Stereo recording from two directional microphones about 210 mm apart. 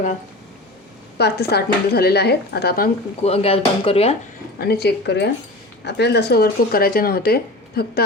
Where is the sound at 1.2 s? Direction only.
50° left (ahead or behind).